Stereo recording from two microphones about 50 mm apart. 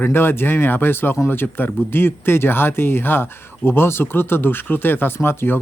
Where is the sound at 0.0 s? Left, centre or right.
Left.